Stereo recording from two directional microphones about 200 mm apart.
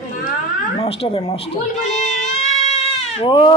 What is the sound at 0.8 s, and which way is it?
Speech, 30° left (ahead or behind).